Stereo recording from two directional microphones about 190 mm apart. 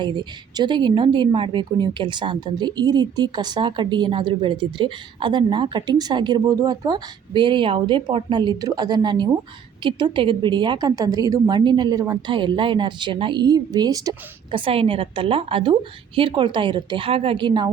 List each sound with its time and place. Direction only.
0.0 s a woman's voice: 25° right (ahead or behind)